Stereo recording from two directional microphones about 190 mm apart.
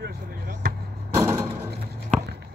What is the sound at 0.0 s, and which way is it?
Basketball bounce, 50° right (ahead or behind).